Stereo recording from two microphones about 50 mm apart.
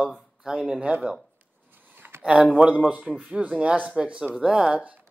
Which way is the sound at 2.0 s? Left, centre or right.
Right.